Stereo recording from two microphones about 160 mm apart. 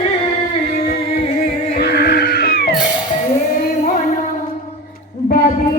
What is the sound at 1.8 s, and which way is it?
Music, 85° left.